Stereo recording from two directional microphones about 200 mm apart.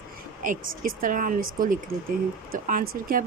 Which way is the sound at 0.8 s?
45° right (ahead or behind).